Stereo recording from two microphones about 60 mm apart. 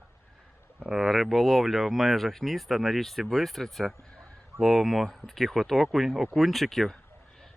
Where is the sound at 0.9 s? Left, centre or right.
Centre.